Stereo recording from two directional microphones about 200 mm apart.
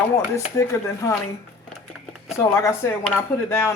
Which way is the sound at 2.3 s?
15° left (ahead or behind).